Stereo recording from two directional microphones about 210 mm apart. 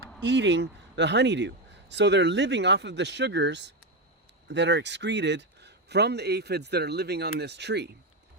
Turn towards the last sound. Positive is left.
turn(degrees=-55)  # may be behind; listen again after turning